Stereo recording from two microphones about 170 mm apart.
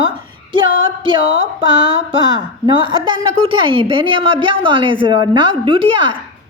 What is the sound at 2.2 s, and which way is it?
A woman's voice, 30° right (ahead or behind).